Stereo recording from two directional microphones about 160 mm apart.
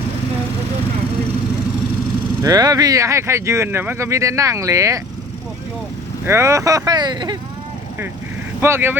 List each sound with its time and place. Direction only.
2.4 s speech: 25° right (ahead or behind)
6.2 s speech: 15° right (ahead or behind)
8.6 s speech: 15° right (ahead or behind)